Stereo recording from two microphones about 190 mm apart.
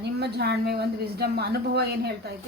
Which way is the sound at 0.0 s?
60° right (ahead or behind).